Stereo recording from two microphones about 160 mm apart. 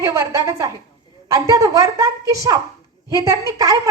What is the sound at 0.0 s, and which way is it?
A woman's voice, 20° right (ahead or behind).